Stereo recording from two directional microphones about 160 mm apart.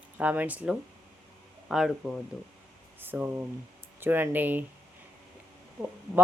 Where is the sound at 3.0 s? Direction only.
10° right (ahead or behind).